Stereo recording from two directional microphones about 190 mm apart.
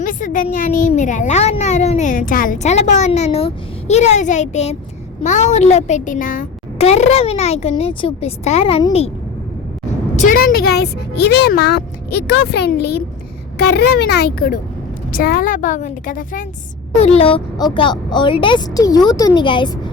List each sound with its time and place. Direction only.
0.0 s a child's voice: 45° left (ahead or behind)
10.2 s a woman's voice: 45° left (ahead or behind)
17.0 s speech: 30° left (ahead or behind)